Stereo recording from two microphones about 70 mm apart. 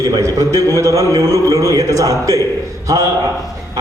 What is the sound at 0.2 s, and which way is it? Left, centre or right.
A man's voice, right.